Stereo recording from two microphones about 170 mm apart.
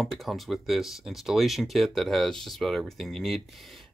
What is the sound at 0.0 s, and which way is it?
Speech, centre (ahead or behind).